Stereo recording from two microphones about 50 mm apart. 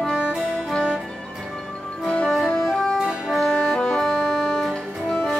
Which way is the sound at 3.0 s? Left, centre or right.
Centre.